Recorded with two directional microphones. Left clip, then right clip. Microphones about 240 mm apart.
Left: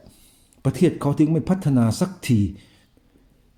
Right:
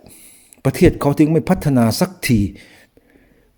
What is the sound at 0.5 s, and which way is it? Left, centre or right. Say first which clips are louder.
Speech: right 7 dB; right.